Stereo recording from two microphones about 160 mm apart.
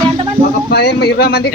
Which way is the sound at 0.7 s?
90° left.